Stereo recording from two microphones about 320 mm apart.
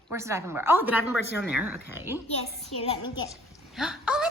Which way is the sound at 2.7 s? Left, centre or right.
Centre.